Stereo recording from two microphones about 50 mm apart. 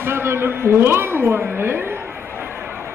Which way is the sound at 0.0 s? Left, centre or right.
Right.